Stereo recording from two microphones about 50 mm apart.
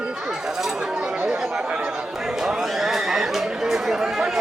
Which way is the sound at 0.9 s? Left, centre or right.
Right.